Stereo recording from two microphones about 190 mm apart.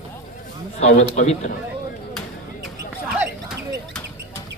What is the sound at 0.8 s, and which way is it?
Speech, 35° left (ahead or behind).